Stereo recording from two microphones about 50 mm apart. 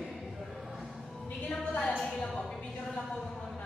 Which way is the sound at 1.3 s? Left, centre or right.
Left.